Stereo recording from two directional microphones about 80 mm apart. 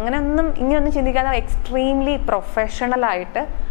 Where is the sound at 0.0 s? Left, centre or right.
Left.